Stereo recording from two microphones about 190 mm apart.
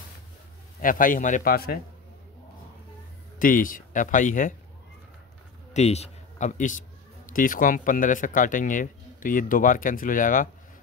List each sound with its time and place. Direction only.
0.7 s speech: 45° left (ahead or behind)
3.3 s speech: 45° left (ahead or behind)
5.7 s a man's voice: 35° left (ahead or behind)